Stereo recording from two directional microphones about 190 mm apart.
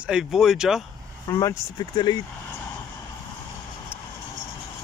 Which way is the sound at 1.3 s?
15° left (ahead or behind).